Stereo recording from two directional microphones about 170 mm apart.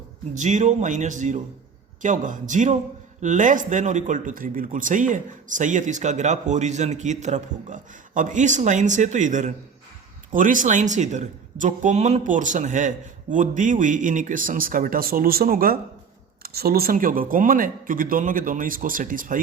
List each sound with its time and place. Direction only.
0.3 s speech: 45° right (ahead or behind)